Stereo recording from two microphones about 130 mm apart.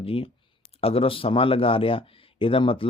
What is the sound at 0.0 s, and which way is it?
Speech, 45° left (ahead or behind).